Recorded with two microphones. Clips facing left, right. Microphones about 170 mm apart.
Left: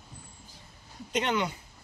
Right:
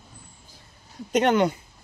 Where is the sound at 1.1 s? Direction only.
50° right (ahead or behind).